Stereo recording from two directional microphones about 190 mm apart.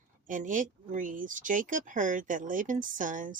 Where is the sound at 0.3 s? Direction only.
45° right (ahead or behind).